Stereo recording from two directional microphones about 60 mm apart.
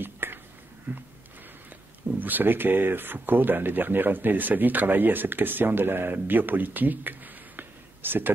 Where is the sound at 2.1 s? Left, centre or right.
Right.